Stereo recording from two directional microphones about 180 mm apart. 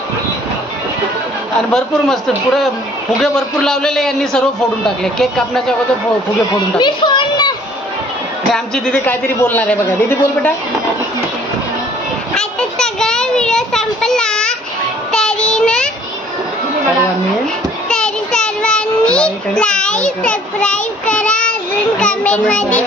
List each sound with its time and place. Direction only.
1.7 s a man's voice: centre (ahead or behind)
6.8 s speech: 25° left (ahead or behind)
8.7 s a woman's voice: 5° left (ahead or behind)
12.4 s a man's voice: 5° left (ahead or behind)
15.1 s child singing: 5° left (ahead or behind)
17.8 s child singing: 5° left (ahead or behind)
22.0 s a woman's voice: 5° left (ahead or behind)